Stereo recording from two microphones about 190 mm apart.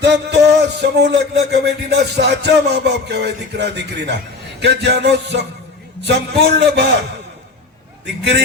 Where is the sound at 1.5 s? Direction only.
60° right (ahead or behind).